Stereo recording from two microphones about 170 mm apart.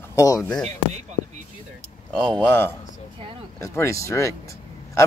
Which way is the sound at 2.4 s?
10° left (ahead or behind).